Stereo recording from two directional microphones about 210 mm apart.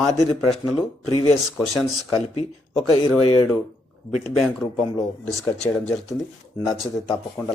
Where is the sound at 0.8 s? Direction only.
20° left (ahead or behind).